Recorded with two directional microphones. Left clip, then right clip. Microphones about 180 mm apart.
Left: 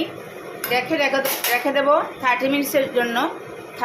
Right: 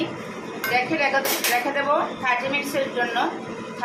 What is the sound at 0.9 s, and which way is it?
Speech, 45° left (ahead or behind).